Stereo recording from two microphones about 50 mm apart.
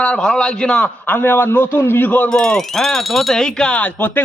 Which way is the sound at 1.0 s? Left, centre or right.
Left.